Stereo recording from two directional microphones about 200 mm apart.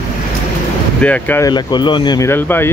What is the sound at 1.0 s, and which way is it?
Speech, 10° left (ahead or behind).